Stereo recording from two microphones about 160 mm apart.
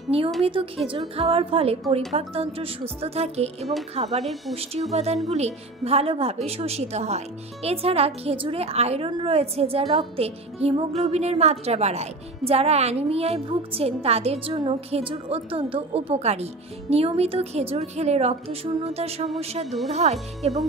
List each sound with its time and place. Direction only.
0.4 s speech: 35° right (ahead or behind)
4.2 s speech: centre (ahead or behind)
4.9 s speech: 40° right (ahead or behind)